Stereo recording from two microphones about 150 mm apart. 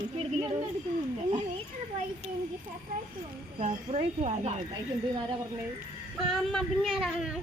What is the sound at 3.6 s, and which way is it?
Speech, 45° right (ahead or behind).